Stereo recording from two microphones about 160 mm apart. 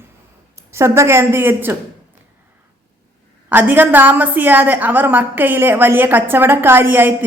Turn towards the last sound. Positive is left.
turn(degrees=-10)  # may be behind; listen again after turning